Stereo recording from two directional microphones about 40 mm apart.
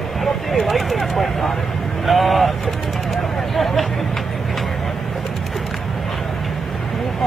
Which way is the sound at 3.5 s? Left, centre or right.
Centre.